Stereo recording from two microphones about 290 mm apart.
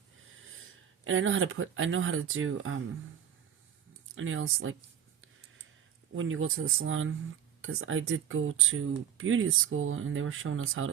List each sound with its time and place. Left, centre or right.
0.4 s speech: right
4.1 s speech: right
6.1 s speech: right